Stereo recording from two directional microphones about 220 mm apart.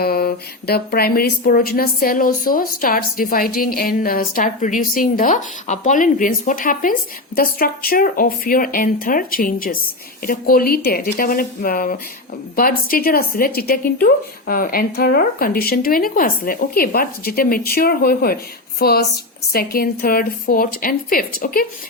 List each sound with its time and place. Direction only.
0.0 s speech: 45° left (ahead or behind)